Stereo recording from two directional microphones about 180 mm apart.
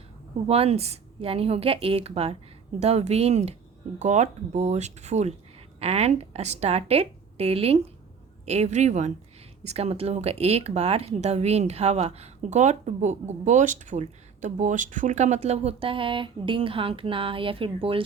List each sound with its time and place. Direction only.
0.4 s speech: 35° right (ahead or behind)